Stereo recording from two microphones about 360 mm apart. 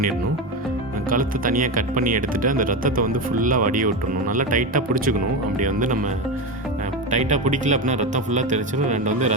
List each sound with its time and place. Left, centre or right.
1.1 s speech: right
7.1 s speech: centre